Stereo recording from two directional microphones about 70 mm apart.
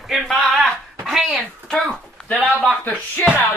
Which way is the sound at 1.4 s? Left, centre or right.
Centre.